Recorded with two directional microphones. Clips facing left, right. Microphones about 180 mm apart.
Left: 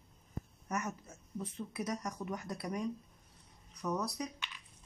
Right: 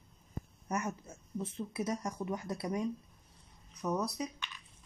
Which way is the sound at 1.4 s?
30° right (ahead or behind).